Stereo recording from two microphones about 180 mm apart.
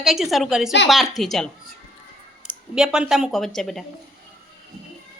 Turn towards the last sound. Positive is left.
turn(degrees=0)  # may be behind; listen again after turning